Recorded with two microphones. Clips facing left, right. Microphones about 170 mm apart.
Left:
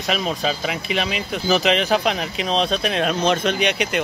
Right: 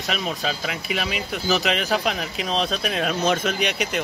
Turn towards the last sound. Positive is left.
turn(degrees=0)  # may be behind; listen again after turning